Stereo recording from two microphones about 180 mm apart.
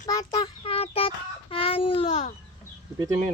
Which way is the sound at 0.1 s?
20° left (ahead or behind).